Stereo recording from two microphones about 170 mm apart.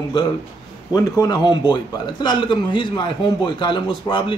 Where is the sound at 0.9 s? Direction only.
20° left (ahead or behind).